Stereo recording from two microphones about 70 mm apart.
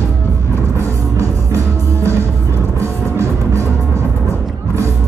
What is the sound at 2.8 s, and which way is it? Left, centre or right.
Music, right.